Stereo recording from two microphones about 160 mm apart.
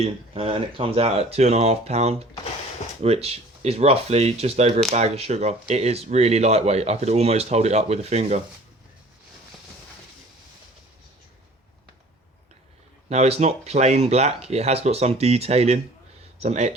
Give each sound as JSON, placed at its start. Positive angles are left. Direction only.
{"t": 0.0, "sound": "speech", "side_deg": -35}
{"t": 13.1, "sound": "speech", "side_deg": -40}